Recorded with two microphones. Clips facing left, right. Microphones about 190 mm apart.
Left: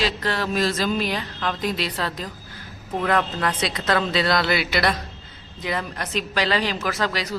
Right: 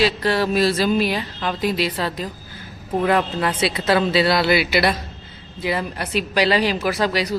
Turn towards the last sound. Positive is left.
turn(degrees=-10)  # may be behind; listen again after turning